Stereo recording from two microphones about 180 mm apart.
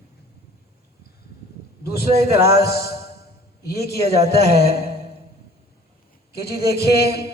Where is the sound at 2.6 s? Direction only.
60° left (ahead or behind).